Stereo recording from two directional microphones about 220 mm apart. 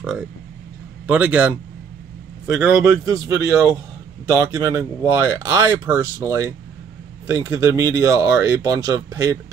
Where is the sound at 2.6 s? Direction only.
15° right (ahead or behind).